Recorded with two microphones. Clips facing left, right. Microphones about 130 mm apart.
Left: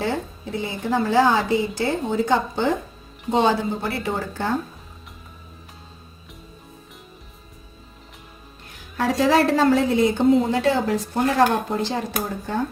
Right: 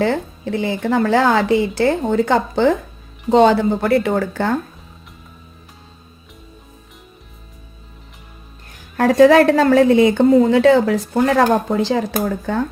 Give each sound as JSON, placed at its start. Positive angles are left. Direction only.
{"t": 0.0, "sound": "speech", "side_deg": -90}
{"t": 3.3, "sound": "speech", "side_deg": -70}
{"t": 9.0, "sound": "a woman's voice", "side_deg": -55}